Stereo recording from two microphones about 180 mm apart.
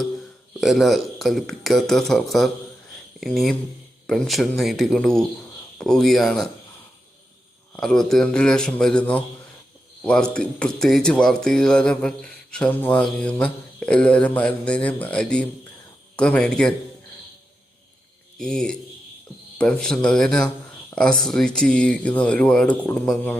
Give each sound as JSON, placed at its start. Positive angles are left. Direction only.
{"t": 0.6, "sound": "speech", "side_deg": 0}
{"t": 7.8, "sound": "speech", "side_deg": 5}
{"t": 18.3, "sound": "speech", "side_deg": 5}